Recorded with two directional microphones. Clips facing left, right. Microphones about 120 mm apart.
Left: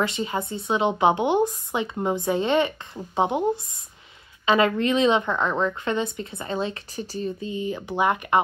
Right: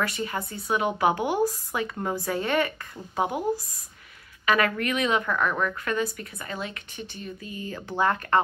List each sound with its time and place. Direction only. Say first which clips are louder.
0.0 s a woman's voice: left 3 dB; 20° left (ahead or behind)